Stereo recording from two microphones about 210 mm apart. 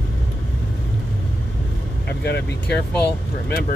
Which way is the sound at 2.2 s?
50° left (ahead or behind).